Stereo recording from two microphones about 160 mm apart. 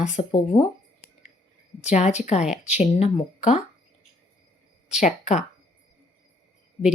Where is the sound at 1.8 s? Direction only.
45° left (ahead or behind).